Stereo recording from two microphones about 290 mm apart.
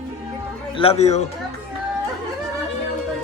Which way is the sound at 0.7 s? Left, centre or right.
Left.